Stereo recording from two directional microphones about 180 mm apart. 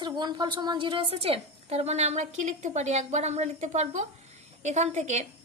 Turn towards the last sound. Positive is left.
turn(degrees=-40)  # may be behind; listen again after turning